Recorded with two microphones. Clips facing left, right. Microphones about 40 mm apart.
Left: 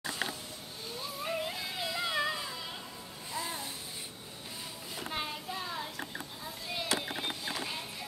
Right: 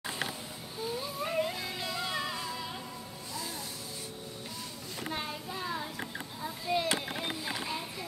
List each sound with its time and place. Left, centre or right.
0.8 s music: centre
3.3 s music: left
5.1 s a sound: centre